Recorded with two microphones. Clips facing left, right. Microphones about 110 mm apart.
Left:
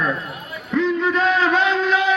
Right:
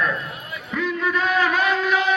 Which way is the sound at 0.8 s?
20° left (ahead or behind).